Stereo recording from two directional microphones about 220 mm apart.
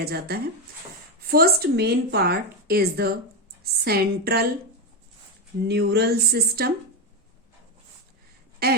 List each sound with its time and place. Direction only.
0.0 s a woman's voice: 45° right (ahead or behind)
5.6 s a woman's voice: 50° right (ahead or behind)
8.6 s speech: 45° right (ahead or behind)